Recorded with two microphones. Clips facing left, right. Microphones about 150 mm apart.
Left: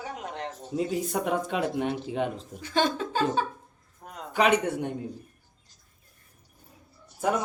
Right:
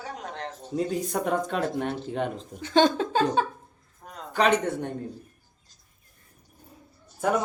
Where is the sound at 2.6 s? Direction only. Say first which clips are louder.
Right 5 dB; 30° right (ahead or behind).